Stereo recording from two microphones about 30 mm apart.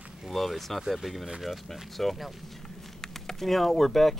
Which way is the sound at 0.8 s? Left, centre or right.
Centre.